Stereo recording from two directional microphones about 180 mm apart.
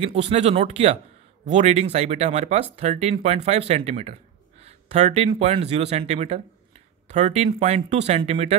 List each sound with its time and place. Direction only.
0.0 s speech: 35° right (ahead or behind)